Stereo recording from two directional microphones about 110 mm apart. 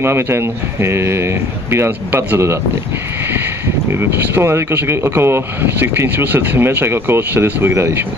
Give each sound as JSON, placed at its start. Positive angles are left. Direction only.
{"t": 0.0, "sound": "speech", "side_deg": -25}
{"t": 4.3, "sound": "speech", "side_deg": -20}